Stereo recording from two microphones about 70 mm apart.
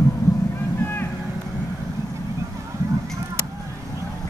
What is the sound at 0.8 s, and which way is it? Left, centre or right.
Vehicle, left.